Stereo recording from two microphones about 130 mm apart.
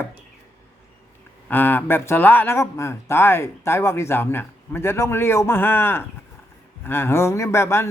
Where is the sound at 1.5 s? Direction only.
15° left (ahead or behind).